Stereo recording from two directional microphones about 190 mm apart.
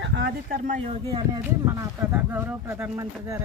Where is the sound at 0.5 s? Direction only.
40° right (ahead or behind).